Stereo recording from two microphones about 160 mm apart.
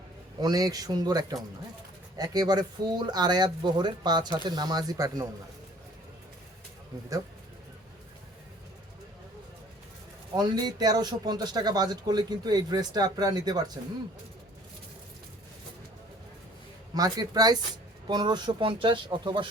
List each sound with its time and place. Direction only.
0.3 s speech: 25° right (ahead or behind)
10.3 s speech: 25° right (ahead or behind)
16.9 s speech: 25° right (ahead or behind)